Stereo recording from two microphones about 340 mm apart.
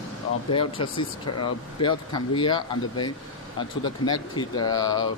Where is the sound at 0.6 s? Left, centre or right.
Centre.